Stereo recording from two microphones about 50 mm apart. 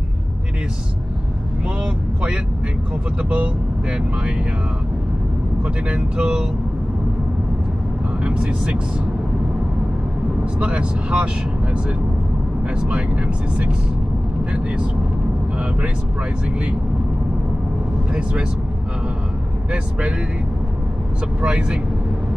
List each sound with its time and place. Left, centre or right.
3.2 s speech: right
5.9 s speech: right
8.2 s speech: right
10.6 s speech: right
12.6 s speech: right
18.1 s speech: right
19.7 s speech: right
21.4 s speech: centre